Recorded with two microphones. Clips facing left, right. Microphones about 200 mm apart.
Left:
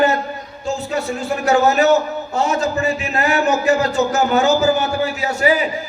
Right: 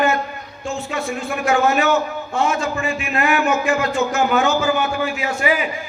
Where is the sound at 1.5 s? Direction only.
40° left (ahead or behind).